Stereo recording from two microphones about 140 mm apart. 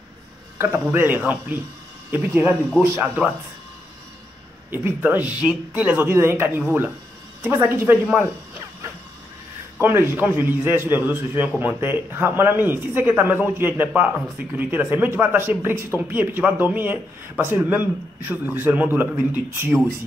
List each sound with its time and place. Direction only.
0.6 s speech: 15° right (ahead or behind)
4.6 s speech: 15° right (ahead or behind)
9.8 s speech: 15° right (ahead or behind)